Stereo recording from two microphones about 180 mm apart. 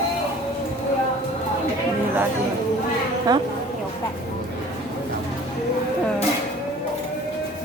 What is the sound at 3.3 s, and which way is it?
Speech, 20° right (ahead or behind).